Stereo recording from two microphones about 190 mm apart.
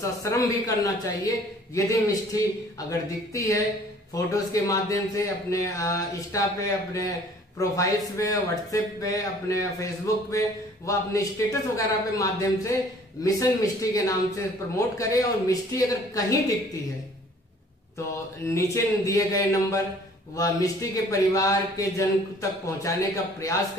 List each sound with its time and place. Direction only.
0.0 s a man's voice: 15° left (ahead or behind)
18.5 s a man's voice: 15° left (ahead or behind)